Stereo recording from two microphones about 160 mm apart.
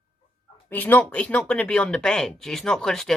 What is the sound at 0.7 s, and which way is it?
Speech, 10° left (ahead or behind).